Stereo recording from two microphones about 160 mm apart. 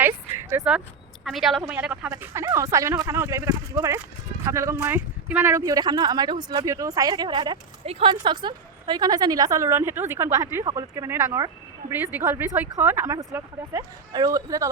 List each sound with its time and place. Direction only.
1.2 s a woman's voice: centre (ahead or behind); by 14.7 s 20° right (ahead or behind)